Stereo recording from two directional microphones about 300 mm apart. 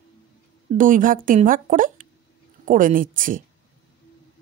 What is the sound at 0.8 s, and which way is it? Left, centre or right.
Speech, right.